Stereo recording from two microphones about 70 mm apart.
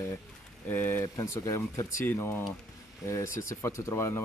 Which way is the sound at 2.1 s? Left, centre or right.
Left.